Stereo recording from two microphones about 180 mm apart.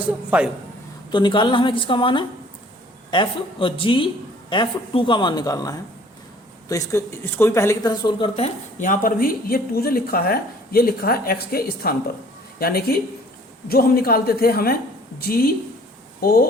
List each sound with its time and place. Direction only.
0.0 s a man's voice: 5° right (ahead or behind)
1.1 s speech: 25° left (ahead or behind)
8.8 s speech: 50° left (ahead or behind)